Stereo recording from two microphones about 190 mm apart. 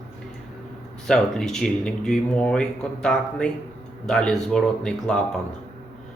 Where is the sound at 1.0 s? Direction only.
5° left (ahead or behind).